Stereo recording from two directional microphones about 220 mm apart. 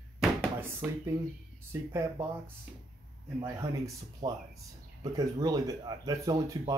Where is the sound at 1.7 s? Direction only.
10° right (ahead or behind).